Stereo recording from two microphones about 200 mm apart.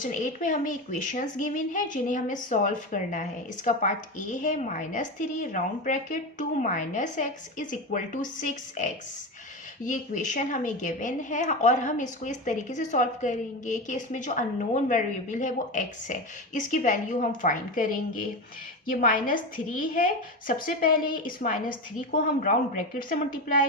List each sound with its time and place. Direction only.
0.0 s a woman's voice: 40° left (ahead or behind)